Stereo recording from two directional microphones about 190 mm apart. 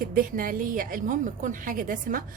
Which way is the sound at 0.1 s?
45° right (ahead or behind).